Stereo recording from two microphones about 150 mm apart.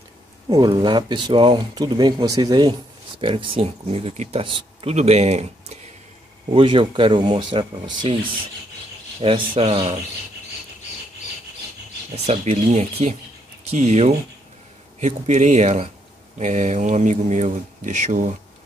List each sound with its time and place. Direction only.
0.5 s speech: 30° right (ahead or behind); by 5.8 s 45° right (ahead or behind)
6.5 s speech: 35° right (ahead or behind)
9.2 s speech: 40° right (ahead or behind)
12.3 s speech: 45° right (ahead or behind)